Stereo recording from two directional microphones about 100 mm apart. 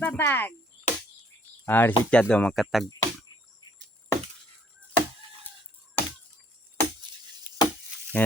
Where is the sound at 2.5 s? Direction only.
Centre (ahead or behind).